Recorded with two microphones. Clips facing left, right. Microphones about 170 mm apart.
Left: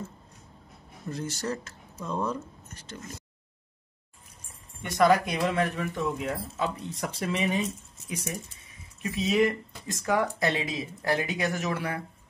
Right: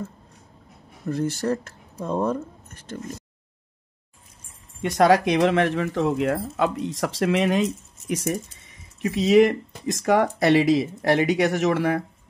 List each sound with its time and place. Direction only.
1.0 s speech: 55° right (ahead or behind)
4.8 s speech: 90° right